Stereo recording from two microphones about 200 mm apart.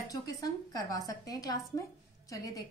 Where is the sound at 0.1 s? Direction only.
20° left (ahead or behind).